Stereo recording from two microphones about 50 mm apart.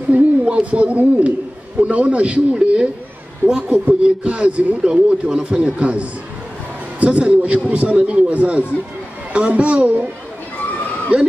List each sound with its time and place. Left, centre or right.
0.1 s speech: right